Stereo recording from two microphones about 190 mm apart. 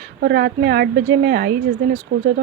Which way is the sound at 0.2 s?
55° right (ahead or behind).